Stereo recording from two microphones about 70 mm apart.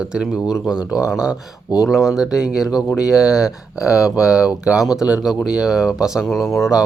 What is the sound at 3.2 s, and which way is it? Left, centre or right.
Speech, left.